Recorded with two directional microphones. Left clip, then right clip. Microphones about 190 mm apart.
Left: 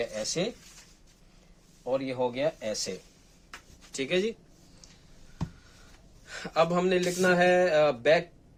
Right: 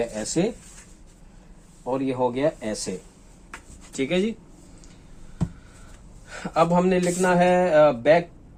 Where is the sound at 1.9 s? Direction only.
40° left (ahead or behind).